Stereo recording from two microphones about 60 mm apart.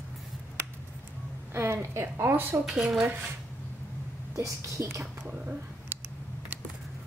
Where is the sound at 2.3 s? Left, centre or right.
Right.